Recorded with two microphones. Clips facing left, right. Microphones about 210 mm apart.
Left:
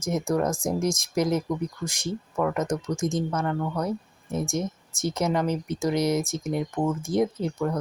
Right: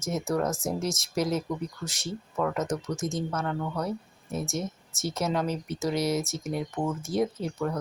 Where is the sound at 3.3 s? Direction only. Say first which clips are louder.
Left 3 dB; centre (ahead or behind).